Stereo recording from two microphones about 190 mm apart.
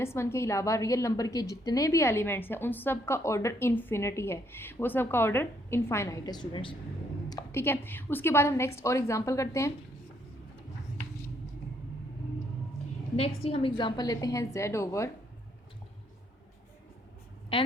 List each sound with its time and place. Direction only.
0.0 s a woman's voice: 15° left (ahead or behind)
7.3 s a woman's voice: 15° left (ahead or behind)
13.1 s a woman's voice: 30° left (ahead or behind); by 15.1 s 15° left (ahead or behind)
17.5 s a woman's voice: 30° left (ahead or behind)